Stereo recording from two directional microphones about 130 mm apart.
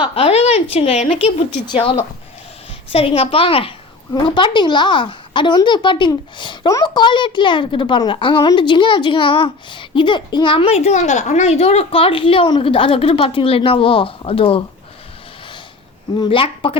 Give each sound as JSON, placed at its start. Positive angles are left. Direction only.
{"t": 0.0, "sound": "a woman's voice", "side_deg": 50}
{"t": 1.6, "sound": "a woman's voice", "side_deg": 40}
{"t": 16.1, "sound": "a woman's voice", "side_deg": 35}